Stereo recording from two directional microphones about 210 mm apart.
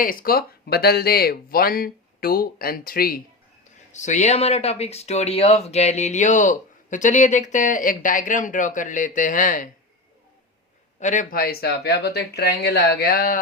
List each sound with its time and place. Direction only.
0.0 s speech: 45° left (ahead or behind)
11.0 s speech: 35° left (ahead or behind)